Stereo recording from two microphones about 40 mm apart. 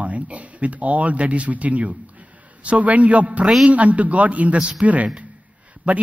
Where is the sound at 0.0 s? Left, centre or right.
Right.